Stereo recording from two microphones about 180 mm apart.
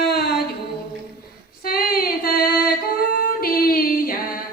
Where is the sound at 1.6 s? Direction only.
55° left (ahead or behind).